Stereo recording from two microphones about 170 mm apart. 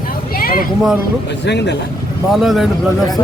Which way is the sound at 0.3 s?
60° left (ahead or behind).